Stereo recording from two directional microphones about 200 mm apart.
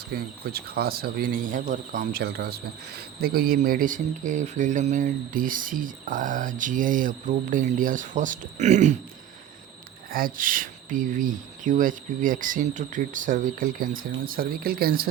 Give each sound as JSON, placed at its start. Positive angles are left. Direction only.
{"t": 0.1, "sound": "speech", "side_deg": -50}
{"t": 10.1, "sound": "speech", "side_deg": -45}